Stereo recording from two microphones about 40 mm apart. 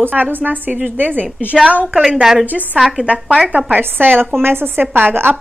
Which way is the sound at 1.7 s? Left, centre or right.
Right.